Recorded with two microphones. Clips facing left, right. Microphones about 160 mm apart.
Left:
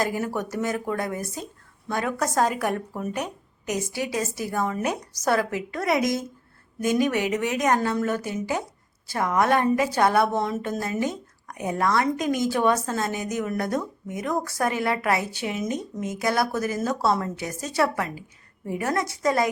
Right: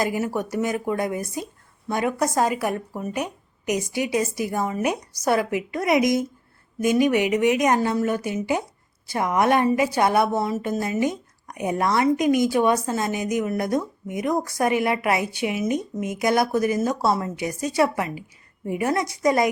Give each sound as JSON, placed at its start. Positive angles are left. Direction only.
{"t": 0.0, "sound": "a woman's voice", "side_deg": -10}